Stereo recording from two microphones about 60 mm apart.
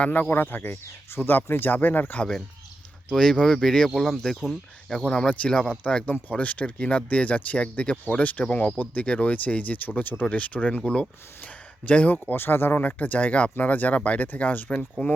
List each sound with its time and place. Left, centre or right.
0.0 s speech: left
3.1 s speech: centre
12.3 s speech: left
13.0 s speech: left